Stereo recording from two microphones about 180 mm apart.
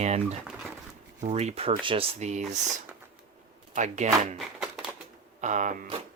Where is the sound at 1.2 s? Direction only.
40° right (ahead or behind).